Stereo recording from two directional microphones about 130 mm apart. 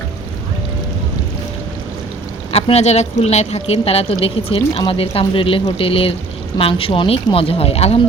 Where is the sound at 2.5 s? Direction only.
50° left (ahead or behind).